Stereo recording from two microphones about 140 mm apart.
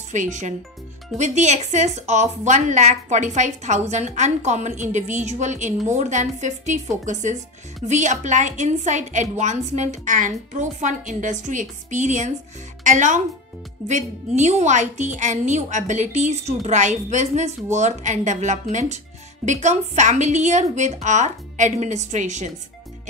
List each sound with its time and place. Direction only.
0.1 s a woman's voice: 60° right (ahead or behind)